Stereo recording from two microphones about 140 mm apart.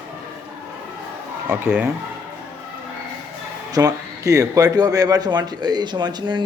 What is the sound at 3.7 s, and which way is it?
A man's voice, 25° right (ahead or behind).